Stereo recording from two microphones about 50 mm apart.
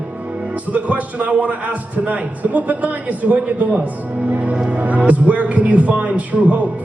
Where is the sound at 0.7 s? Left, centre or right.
Right.